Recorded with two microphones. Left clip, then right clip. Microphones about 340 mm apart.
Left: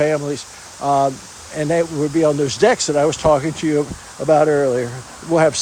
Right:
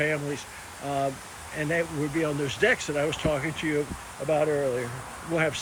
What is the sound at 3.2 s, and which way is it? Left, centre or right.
Speech, left.